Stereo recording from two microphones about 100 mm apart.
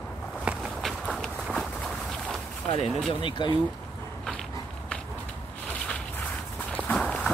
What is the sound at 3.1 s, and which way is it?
Speech, 55° left (ahead or behind).